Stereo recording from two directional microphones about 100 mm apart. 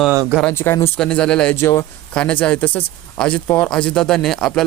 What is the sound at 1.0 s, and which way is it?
Speech, 10° left (ahead or behind).